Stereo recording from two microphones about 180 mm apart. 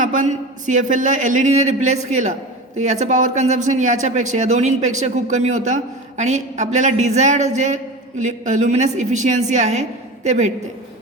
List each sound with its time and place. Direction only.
0.0 s a man's voice: 45° right (ahead or behind)